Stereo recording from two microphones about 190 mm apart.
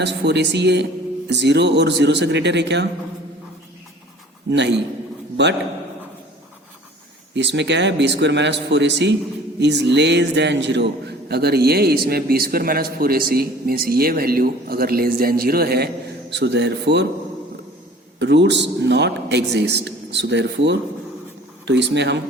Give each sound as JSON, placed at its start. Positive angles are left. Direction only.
{"t": 0.0, "sound": "speech", "side_deg": -65}
{"t": 4.4, "sound": "speech", "side_deg": -65}
{"t": 7.3, "sound": "a man's voice", "side_deg": -70}
{"t": 16.3, "sound": "speech", "side_deg": -65}
{"t": 18.2, "sound": "a man's voice", "side_deg": -65}